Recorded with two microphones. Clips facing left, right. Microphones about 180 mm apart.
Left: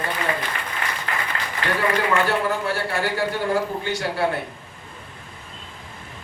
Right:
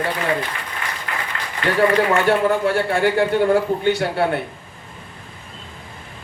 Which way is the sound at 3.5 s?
60° right (ahead or behind).